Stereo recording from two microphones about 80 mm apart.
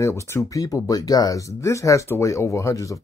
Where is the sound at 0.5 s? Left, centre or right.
Left.